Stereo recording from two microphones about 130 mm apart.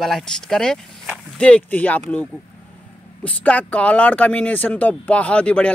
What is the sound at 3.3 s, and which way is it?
Speech, 10° left (ahead or behind).